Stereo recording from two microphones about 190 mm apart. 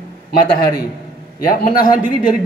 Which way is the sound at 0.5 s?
50° left (ahead or behind).